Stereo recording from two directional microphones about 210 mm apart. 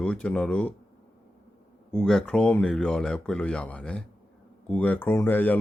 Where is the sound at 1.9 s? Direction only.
Centre (ahead or behind).